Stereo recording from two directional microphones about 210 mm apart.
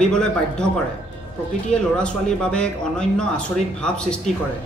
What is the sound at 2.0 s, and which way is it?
A woman's voice, 5° left (ahead or behind).